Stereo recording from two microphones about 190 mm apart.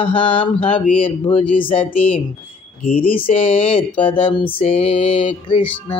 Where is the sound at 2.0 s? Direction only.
5° left (ahead or behind).